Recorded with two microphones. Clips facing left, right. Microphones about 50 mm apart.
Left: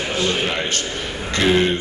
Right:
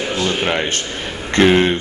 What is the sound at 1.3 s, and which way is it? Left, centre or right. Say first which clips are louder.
Speech: right 4 dB; right.